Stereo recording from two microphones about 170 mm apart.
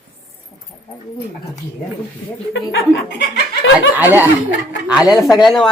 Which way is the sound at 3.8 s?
10° right (ahead or behind).